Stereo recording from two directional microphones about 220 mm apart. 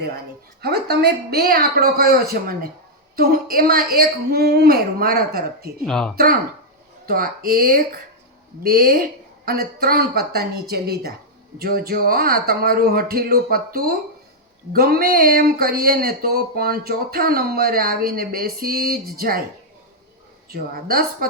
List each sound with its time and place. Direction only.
0.6 s speech: 45° right (ahead or behind)
5.8 s speech: 5° left (ahead or behind)
7.0 s speech: 40° right (ahead or behind)
20.5 s speech: 45° right (ahead or behind)